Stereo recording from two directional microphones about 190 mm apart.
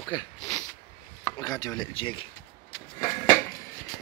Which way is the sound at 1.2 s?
25° left (ahead or behind).